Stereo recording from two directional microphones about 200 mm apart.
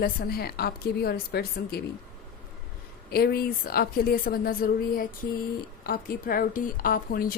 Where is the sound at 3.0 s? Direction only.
50° left (ahead or behind).